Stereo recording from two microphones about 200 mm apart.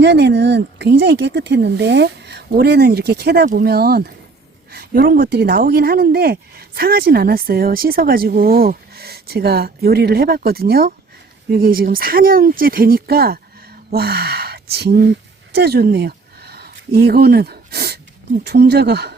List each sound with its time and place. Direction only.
0.0 s speech: 55° right (ahead or behind)